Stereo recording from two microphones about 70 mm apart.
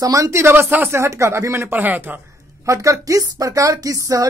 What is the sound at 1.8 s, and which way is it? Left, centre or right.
Speech, right.